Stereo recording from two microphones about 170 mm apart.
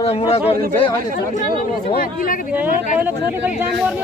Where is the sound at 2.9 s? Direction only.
10° right (ahead or behind).